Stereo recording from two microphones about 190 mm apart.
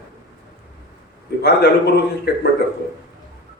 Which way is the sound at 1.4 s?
55° left (ahead or behind).